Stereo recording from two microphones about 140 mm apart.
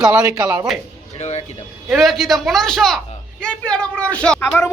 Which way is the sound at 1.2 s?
50° left (ahead or behind).